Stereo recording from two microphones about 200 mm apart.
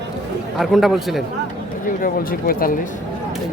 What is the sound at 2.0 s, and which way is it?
Speech, 45° left (ahead or behind).